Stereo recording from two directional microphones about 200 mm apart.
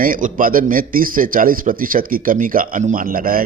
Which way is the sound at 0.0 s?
45° right (ahead or behind).